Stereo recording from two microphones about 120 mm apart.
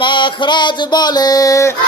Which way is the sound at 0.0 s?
40° left (ahead or behind).